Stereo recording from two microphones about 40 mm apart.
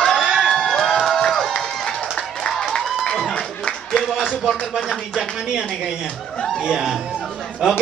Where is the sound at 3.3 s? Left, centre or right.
Left.